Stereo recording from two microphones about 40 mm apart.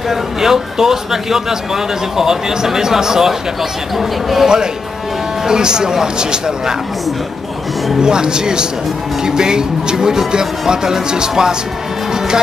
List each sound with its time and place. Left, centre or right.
0.1 s speech: centre
5.5 s speech: centre
8.0 s speech: centre